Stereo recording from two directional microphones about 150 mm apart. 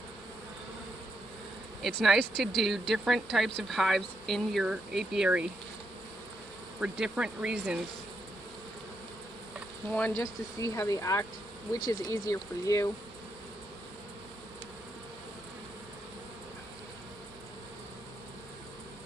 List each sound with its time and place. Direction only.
1.8 s speech: centre (ahead or behind)
6.8 s speech: 5° right (ahead or behind)
9.8 s speech: 10° left (ahead or behind)
10.2 s speech: 20° left (ahead or behind)